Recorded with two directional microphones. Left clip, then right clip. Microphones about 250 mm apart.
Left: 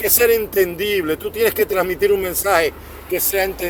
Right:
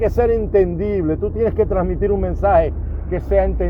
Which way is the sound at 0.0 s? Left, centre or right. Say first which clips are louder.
Left 1 dB; left.